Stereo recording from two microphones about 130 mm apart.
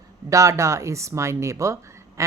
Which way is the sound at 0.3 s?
25° right (ahead or behind).